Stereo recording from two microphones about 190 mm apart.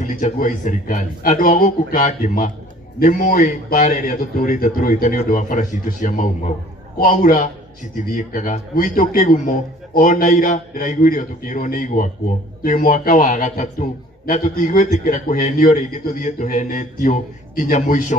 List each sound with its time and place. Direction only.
0.0 s a man's voice: 45° left (ahead or behind)